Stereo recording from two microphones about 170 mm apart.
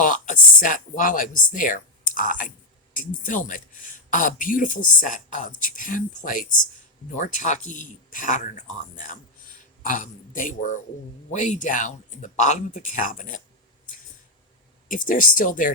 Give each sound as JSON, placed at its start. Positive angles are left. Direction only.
{"t": 0.0, "sound": "speech", "side_deg": 50}
{"t": 14.8, "sound": "speech", "side_deg": 55}